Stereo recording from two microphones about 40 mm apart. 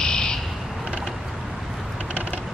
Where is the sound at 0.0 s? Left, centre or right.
Centre.